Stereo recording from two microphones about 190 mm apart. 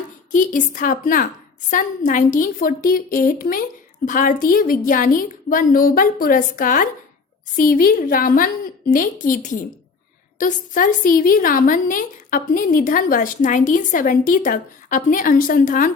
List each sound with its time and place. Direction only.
0.3 s a woman's voice: 40° left (ahead or behind)